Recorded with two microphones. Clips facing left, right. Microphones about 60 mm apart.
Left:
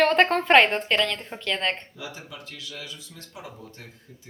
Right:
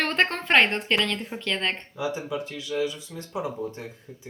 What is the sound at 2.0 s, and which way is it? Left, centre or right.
Speech, right.